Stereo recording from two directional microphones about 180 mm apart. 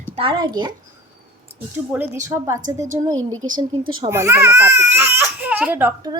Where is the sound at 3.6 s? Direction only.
25° right (ahead or behind).